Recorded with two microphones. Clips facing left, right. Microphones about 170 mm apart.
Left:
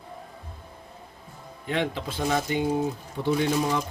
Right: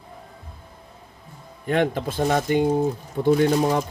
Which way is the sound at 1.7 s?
50° right (ahead or behind).